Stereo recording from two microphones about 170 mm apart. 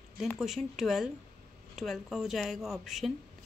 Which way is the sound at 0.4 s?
Centre (ahead or behind).